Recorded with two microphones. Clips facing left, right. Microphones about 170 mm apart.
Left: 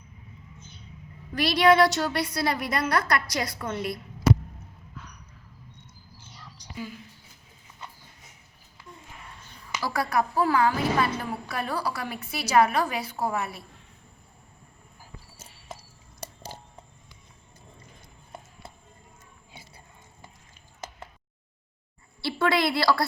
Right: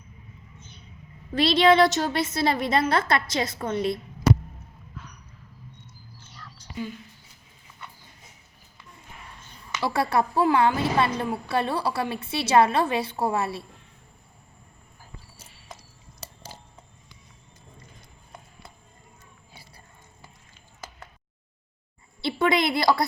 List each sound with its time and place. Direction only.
1.4 s a woman's voice: 25° right (ahead or behind)
6.3 s whispering: 15° left (ahead or behind)
9.8 s a woman's voice: 25° right (ahead or behind)
22.2 s a sound: 20° right (ahead or behind)